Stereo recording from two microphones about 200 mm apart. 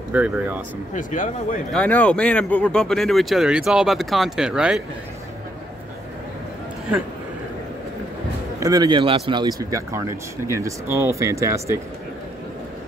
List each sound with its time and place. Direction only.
0.1 s speech: 5° right (ahead or behind)
0.9 s speech: 40° left (ahead or behind)
1.7 s speech: 5° left (ahead or behind)
8.5 s speech: 20° right (ahead or behind)